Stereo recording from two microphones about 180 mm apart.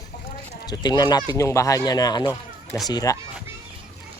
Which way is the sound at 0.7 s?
25° left (ahead or behind).